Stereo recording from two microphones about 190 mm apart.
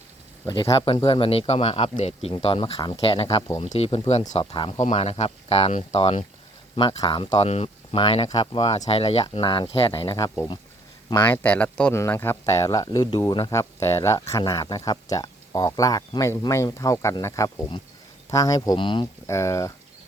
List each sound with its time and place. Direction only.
0.4 s speech: 25° left (ahead or behind)